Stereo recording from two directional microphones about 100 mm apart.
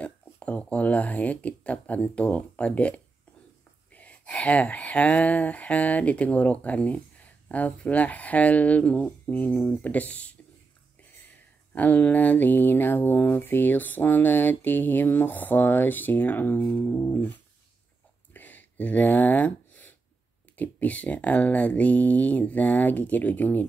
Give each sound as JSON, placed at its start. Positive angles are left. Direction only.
{"t": 0.0, "sound": "speech", "side_deg": 15}
{"t": 3.9, "sound": "speech", "side_deg": 15}
{"t": 11.7, "sound": "speech", "side_deg": 15}
{"t": 18.3, "sound": "a sound", "side_deg": 20}
{"t": 20.5, "sound": "speech", "side_deg": 15}